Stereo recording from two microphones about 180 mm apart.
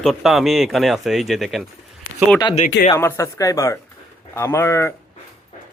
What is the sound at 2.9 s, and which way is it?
A man's voice, 15° left (ahead or behind).